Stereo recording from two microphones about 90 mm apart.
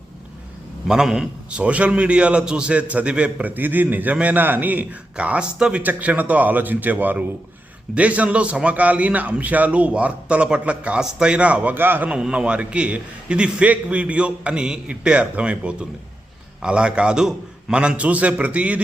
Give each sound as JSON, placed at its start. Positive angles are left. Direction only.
{"t": 0.9, "sound": "a man's voice", "side_deg": -5}
{"t": 12.1, "sound": "a man's voice", "side_deg": -10}